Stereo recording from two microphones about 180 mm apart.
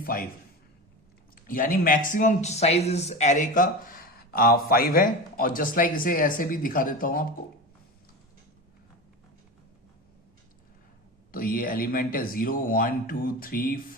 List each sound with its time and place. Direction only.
0.0 s a man's voice: 55° left (ahead or behind)
1.4 s speech: 50° left (ahead or behind)
11.3 s speech: 55° left (ahead or behind)